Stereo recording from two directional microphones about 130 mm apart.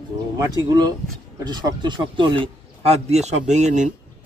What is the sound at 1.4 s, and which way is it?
Speech, 35° right (ahead or behind).